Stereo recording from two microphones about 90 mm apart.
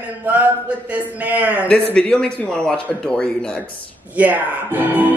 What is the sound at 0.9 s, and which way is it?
Speech, 15° right (ahead or behind).